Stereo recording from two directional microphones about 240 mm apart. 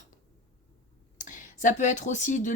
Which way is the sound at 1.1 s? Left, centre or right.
Left.